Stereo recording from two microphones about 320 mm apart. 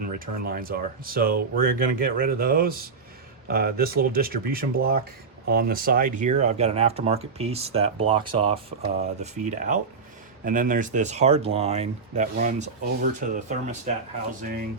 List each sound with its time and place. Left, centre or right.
0.1 s speech: right